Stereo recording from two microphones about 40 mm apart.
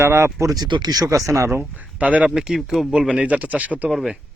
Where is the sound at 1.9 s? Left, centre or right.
Right.